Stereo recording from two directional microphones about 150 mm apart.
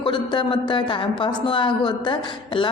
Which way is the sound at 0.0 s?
35° left (ahead or behind).